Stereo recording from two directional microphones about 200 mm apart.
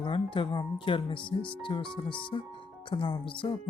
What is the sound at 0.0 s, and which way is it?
Speech, 25° left (ahead or behind).